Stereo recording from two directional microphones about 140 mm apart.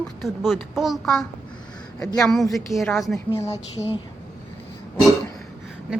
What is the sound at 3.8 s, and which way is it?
Speech, 45° left (ahead or behind).